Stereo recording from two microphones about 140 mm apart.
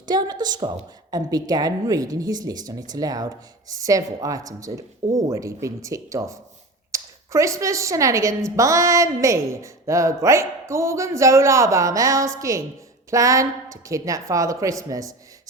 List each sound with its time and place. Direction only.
0.0 s a woman's voice: 30° right (ahead or behind)